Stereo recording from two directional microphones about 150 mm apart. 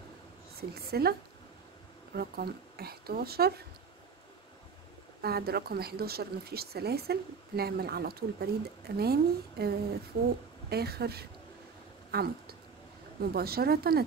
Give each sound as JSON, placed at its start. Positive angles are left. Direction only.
{"t": 0.6, "sound": "speech", "side_deg": -90}
{"t": 2.1, "sound": "speech", "side_deg": -90}
{"t": 5.2, "sound": "speech", "side_deg": -90}
{"t": 10.1, "sound": "a woman's voice", "side_deg": -75}
{"t": 10.7, "sound": "speech", "side_deg": -90}